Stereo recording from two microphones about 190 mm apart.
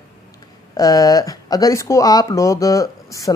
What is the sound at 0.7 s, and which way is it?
Speech, 20° left (ahead or behind).